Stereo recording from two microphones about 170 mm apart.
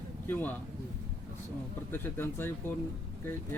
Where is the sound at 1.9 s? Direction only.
15° left (ahead or behind).